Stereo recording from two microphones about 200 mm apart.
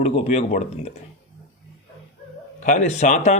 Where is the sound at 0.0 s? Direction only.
30° left (ahead or behind).